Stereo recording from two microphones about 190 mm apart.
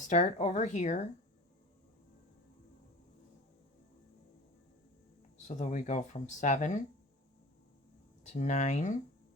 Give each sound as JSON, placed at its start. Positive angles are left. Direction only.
{"t": 0.1, "sound": "speech", "side_deg": 40}
{"t": 5.5, "sound": "speech", "side_deg": 40}
{"t": 8.3, "sound": "speech", "side_deg": 40}